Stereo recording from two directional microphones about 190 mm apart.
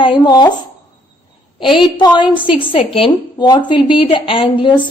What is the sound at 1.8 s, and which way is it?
A woman's voice, 25° left (ahead or behind).